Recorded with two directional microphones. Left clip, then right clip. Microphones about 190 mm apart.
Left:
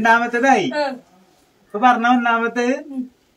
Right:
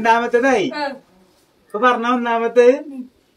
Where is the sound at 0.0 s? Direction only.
15° left (ahead or behind).